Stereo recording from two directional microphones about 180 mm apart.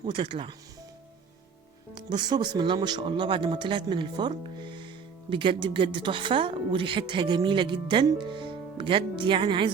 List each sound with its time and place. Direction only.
0.0 s speech: 25° right (ahead or behind)
2.0 s speech: 25° right (ahead or behind)